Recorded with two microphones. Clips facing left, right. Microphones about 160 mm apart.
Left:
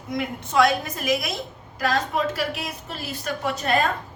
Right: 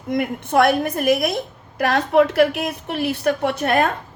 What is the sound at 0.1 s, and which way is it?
A woman's voice, 55° right (ahead or behind).